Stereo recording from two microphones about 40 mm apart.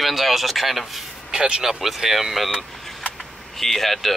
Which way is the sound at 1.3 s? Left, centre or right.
Centre.